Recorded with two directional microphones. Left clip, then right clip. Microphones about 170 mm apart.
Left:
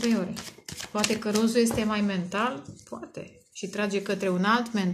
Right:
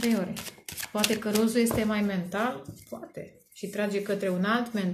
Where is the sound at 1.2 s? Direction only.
30° left (ahead or behind).